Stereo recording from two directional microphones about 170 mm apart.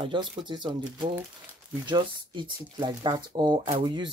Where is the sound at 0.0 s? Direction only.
30° right (ahead or behind).